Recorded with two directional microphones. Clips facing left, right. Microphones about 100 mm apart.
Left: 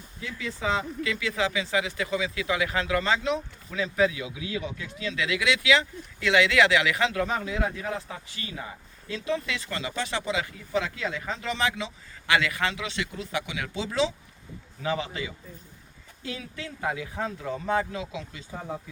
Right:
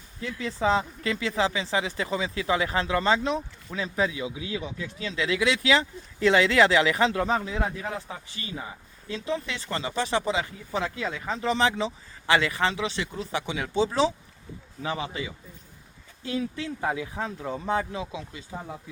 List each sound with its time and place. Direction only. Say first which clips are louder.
0.3 s speech: right 4 dB; 35° right (ahead or behind)
14.8 s speech: left 2 dB; 25° right (ahead or behind)
16.2 s speech: right 7 dB; 30° right (ahead or behind)